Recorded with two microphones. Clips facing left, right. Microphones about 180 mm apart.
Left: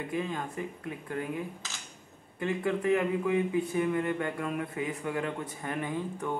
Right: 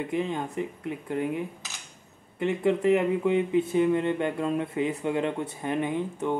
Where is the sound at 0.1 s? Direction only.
20° right (ahead or behind).